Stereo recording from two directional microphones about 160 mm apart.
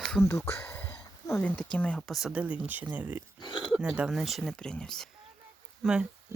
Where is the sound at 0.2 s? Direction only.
15° left (ahead or behind).